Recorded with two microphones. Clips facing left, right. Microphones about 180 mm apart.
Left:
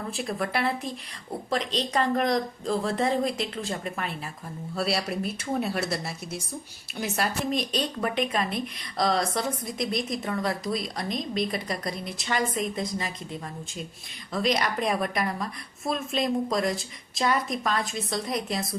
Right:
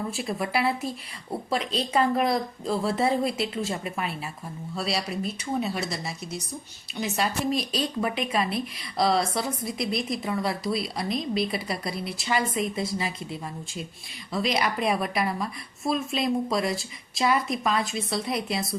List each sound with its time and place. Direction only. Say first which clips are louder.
0.1 s a woman's voice: right 1 dB; centre (ahead or behind)
14.3 s a woman's voice: even; 5° right (ahead or behind)